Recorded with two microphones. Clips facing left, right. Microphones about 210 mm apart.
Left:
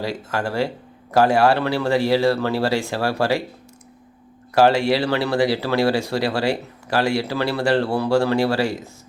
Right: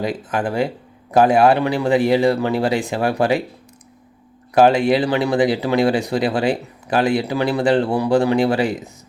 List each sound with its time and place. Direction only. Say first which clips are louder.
0.0 s speech: right 3 dB; 15° right (ahead or behind)
4.5 s speech: right 3 dB; 20° right (ahead or behind)